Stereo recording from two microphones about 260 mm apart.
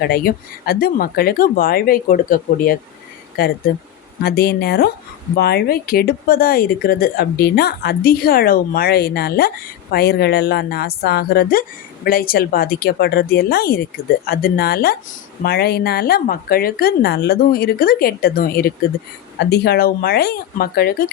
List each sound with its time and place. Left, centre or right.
0.0 s speech: left